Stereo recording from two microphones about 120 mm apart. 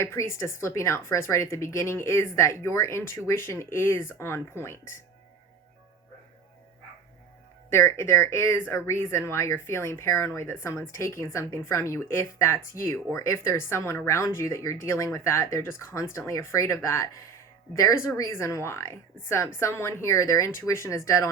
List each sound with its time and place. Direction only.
0.0 s speech: 20° left (ahead or behind)
7.7 s speech: 25° left (ahead or behind)